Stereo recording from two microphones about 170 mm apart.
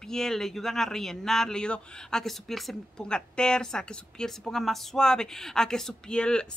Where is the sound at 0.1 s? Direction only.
5° left (ahead or behind).